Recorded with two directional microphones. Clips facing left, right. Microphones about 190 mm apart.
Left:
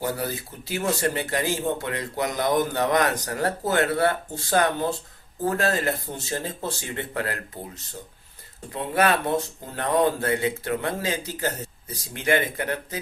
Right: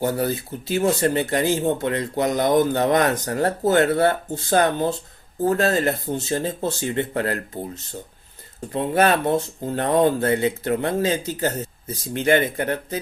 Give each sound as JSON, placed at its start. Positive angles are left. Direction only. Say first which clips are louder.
{"t": 0.0, "sound": "speech", "louder": "right 6 dB", "side_deg": -25}
{"t": 8.7, "sound": "speech", "louder": "right 4 dB", "side_deg": -25}